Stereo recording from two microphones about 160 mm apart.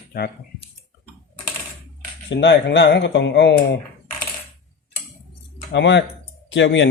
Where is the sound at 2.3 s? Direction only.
90° left.